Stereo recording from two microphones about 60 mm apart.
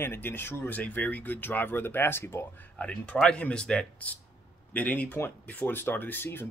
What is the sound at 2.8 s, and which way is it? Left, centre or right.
Speech, centre.